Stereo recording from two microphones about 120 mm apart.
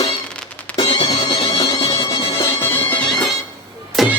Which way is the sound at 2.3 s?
20° left (ahead or behind).